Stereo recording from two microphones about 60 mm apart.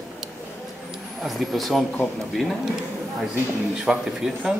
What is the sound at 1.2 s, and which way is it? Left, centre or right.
Speech, centre.